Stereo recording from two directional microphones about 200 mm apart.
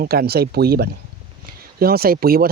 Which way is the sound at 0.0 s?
50° right (ahead or behind).